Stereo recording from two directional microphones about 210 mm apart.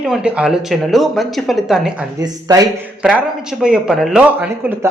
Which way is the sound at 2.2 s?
15° right (ahead or behind).